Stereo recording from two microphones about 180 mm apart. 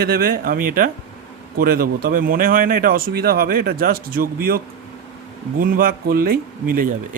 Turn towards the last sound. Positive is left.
turn(degrees=-55)  # may be behind; listen again after turning